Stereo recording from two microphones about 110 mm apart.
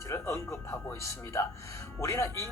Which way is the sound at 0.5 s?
10° left (ahead or behind).